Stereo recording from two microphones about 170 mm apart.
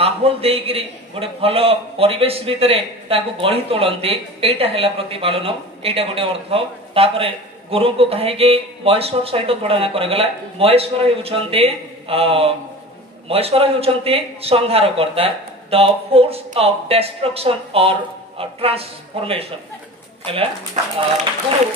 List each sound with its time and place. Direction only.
0.0 s a man's voice: 35° right (ahead or behind)
20.8 s speech: 45° right (ahead or behind)